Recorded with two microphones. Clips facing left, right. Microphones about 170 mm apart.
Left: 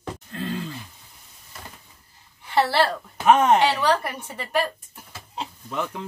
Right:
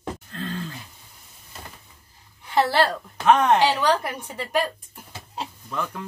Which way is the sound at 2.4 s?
5° left (ahead or behind).